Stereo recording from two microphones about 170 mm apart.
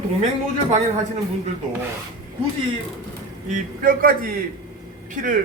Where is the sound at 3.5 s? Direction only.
50° right (ahead or behind).